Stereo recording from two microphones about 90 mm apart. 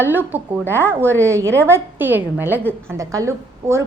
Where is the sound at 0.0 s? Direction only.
20° right (ahead or behind).